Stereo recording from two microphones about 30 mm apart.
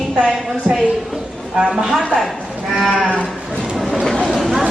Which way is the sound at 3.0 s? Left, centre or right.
Left.